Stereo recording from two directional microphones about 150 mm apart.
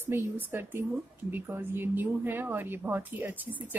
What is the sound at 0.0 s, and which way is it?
A woman's voice, 15° right (ahead or behind).